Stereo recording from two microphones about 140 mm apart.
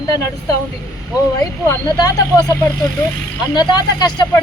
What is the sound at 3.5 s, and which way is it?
Speech, 30° left (ahead or behind).